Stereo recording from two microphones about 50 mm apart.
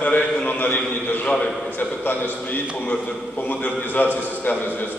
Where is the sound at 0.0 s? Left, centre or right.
Left.